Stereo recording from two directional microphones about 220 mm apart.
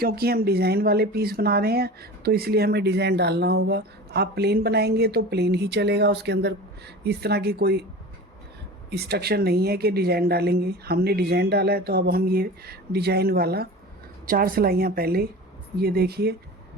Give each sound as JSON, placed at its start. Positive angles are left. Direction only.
{"t": 0.0, "sound": "speech", "side_deg": -45}
{"t": 8.9, "sound": "speech", "side_deg": -45}